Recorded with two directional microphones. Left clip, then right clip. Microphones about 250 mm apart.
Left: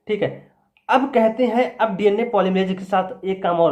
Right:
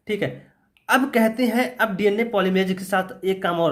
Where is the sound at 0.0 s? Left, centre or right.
Right.